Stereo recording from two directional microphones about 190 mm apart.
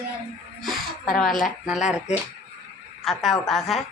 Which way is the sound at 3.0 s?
Centre (ahead or behind).